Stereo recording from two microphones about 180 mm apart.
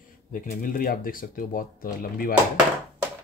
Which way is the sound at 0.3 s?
50° left (ahead or behind).